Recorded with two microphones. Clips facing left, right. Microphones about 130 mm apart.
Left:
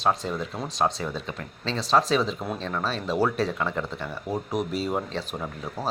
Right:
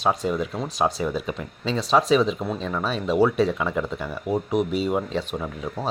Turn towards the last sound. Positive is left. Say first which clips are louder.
# right 3 dB
turn(degrees=0)  # may be behind; listen again after turning